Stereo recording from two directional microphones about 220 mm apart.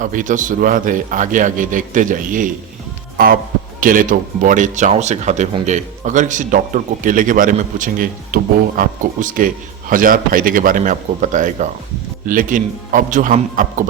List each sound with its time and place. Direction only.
0.0 s speech: 35° right (ahead or behind)
3.8 s speech: 40° right (ahead or behind)